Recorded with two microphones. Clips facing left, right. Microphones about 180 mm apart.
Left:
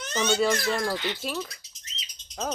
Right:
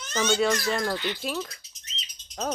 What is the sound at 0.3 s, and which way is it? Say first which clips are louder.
Speech: left 1 dB; centre (ahead or behind).